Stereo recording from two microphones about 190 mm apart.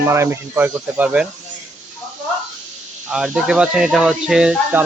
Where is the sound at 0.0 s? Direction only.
15° right (ahead or behind).